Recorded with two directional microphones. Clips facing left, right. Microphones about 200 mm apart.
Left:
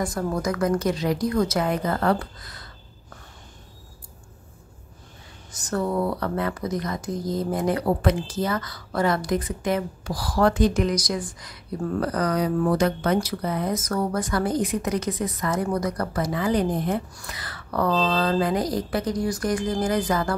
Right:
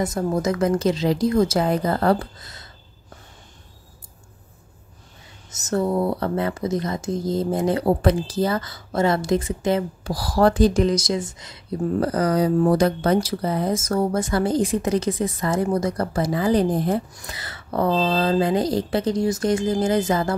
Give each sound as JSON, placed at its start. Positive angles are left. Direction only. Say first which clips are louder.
{"t": 0.0, "sound": "speech", "louder": "right 3 dB", "side_deg": -20}
{"t": 5.5, "sound": "speech", "louder": "right 4 dB", "side_deg": -25}